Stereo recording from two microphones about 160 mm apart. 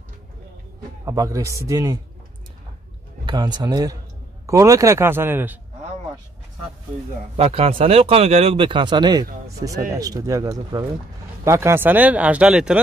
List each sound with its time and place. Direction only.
1.0 s speech: 20° right (ahead or behind)
3.3 s speech: 25° right (ahead or behind)
7.3 s speech: 40° right (ahead or behind); by 12.8 s 5° right (ahead or behind)